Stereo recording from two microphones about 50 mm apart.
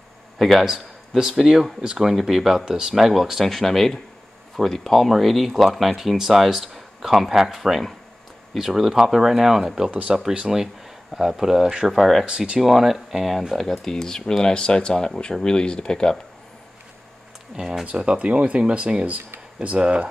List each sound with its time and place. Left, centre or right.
0.4 s speech: centre
9.8 s speech: right
10.1 s speech: centre
12.3 s speech: centre
12.5 s speech: centre
17.6 s speech: centre
17.9 s speech: right